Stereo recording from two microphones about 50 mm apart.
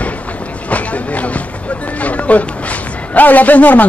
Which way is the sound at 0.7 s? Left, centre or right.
Left.